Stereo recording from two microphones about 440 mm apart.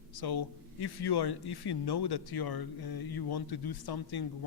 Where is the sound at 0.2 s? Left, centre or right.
Left.